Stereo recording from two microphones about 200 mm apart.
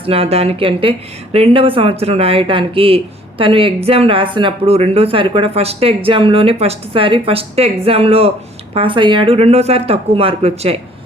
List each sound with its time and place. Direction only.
0.0 s a woman's voice: 30° right (ahead or behind)